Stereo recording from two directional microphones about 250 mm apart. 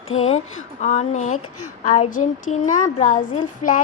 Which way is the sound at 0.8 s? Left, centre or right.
Left.